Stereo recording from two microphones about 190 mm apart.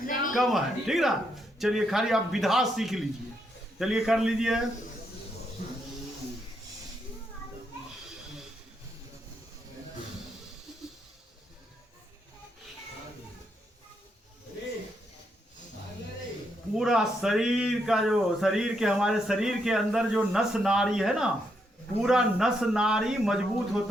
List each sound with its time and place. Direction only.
0.0 s a sound: 45° left (ahead or behind)
0.3 s speech: centre (ahead or behind)
16.7 s speech: centre (ahead or behind)